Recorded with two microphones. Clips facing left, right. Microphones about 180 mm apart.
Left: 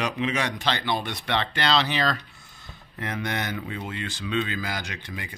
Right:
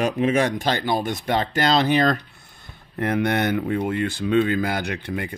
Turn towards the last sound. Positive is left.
turn(degrees=-55)  # may be behind; listen again after turning